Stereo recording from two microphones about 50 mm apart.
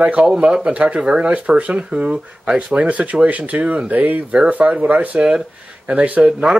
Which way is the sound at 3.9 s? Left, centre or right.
Right.